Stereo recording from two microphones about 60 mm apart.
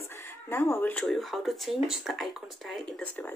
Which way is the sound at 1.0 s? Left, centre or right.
Centre.